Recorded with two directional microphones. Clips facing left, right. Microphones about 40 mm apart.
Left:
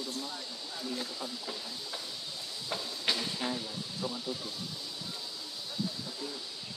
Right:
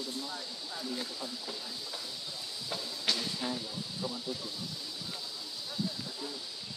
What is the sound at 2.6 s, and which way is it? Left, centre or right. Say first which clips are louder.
Train: left 1 dB; centre.